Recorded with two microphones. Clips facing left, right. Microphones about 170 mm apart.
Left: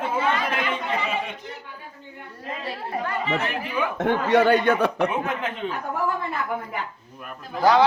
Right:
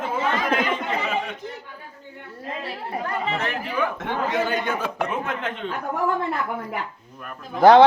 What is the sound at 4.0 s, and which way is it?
Speech, 60° left (ahead or behind).